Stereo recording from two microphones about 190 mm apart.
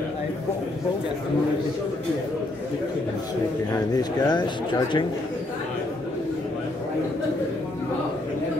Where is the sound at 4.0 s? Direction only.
20° left (ahead or behind).